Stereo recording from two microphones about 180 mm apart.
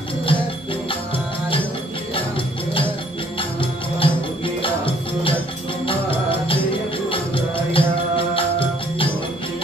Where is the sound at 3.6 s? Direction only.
30° left (ahead or behind).